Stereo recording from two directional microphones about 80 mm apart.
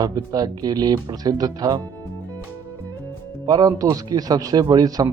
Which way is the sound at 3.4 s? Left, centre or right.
Right.